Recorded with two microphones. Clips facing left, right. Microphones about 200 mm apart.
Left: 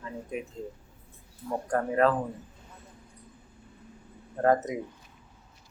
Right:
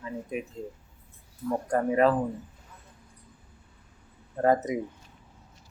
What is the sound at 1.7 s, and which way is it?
Speech, 10° right (ahead or behind).